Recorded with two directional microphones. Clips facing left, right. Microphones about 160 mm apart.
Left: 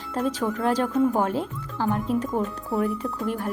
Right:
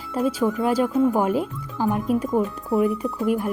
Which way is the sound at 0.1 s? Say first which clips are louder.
Right 4 dB; 10° right (ahead or behind).